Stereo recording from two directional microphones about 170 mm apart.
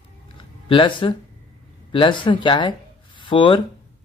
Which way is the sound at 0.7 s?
30° left (ahead or behind).